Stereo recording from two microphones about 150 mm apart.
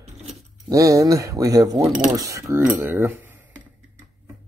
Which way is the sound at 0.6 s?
20° right (ahead or behind).